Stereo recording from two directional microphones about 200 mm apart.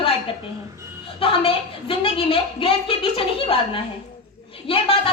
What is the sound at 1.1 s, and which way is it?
Speech, 25° left (ahead or behind).